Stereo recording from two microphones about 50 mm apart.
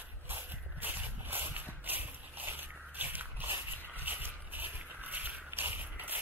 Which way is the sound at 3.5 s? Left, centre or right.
Right.